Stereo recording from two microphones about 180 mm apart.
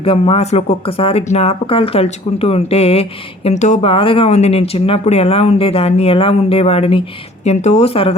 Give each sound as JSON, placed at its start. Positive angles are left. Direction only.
{"t": 0.0, "sound": "speech", "side_deg": 30}